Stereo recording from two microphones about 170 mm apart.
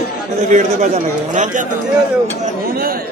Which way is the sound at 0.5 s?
45° right (ahead or behind).